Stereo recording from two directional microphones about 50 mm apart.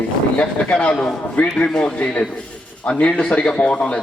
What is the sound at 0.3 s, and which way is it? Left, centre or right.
A man's voice, left.